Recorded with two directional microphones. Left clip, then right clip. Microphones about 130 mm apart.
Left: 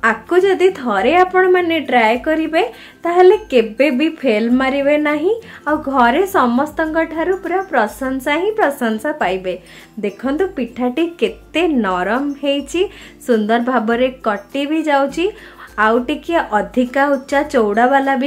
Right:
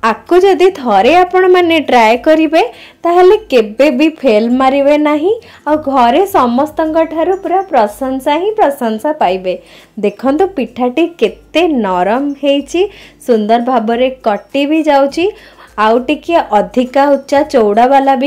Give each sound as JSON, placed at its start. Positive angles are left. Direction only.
{"t": 0.0, "sound": "speech", "side_deg": -35}
{"t": 3.0, "sound": "a woman's voice", "side_deg": -35}
{"t": 10.0, "sound": "a woman's voice", "side_deg": -40}